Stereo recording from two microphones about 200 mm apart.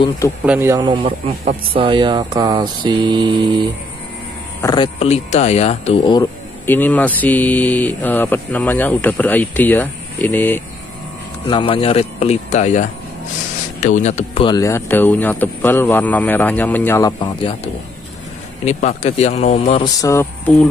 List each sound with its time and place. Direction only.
0.5 s speech: 10° right (ahead or behind)
0.8 s mantra: 30° right (ahead or behind)
4.6 s speech: 20° left (ahead or behind)
6.1 s speech: 10° left (ahead or behind)
11.4 s speech: 25° left (ahead or behind)
13.8 s speech: 35° left (ahead or behind)
18.7 s speech: 35° left (ahead or behind)
19.8 s speech: 15° left (ahead or behind)